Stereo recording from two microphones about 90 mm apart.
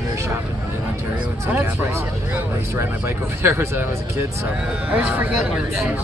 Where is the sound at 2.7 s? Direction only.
30° right (ahead or behind).